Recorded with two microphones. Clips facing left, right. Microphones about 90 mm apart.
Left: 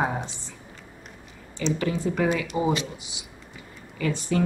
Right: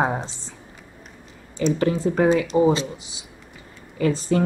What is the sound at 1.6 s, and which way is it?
Speech, 40° right (ahead or behind).